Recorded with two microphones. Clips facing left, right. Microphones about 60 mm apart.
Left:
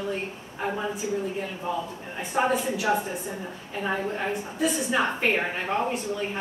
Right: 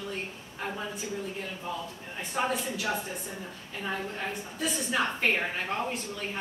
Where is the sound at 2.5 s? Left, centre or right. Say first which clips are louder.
Left 6 dB; centre.